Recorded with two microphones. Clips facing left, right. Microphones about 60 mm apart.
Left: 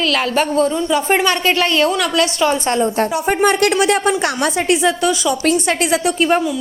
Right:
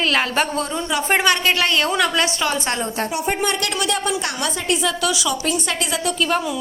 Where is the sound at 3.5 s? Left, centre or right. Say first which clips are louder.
Left 9 dB; left.